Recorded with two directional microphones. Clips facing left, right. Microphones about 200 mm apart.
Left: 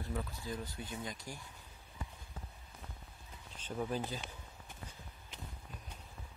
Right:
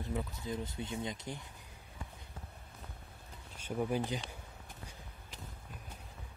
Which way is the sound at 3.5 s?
10° right (ahead or behind).